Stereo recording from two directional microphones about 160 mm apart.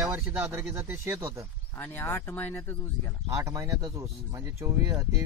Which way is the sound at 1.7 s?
15° left (ahead or behind).